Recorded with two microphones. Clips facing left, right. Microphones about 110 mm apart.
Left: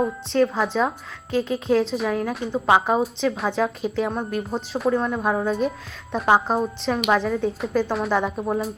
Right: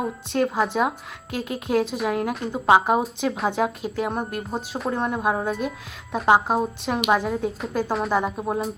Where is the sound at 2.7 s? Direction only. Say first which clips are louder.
Right 1 dB; 10° right (ahead or behind).